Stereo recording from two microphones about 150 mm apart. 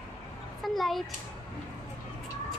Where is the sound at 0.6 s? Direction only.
Centre (ahead or behind).